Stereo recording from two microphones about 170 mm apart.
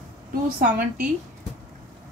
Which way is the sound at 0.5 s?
60° right (ahead or behind).